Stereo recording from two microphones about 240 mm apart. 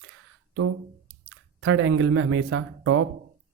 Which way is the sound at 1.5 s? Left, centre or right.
Right.